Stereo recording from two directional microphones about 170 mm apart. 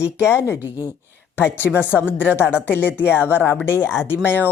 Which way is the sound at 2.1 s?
10° left (ahead or behind).